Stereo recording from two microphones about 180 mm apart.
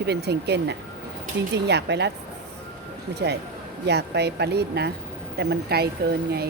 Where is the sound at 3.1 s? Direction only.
70° right (ahead or behind).